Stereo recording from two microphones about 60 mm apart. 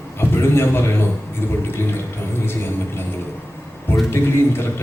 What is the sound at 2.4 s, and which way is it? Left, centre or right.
Speech, left.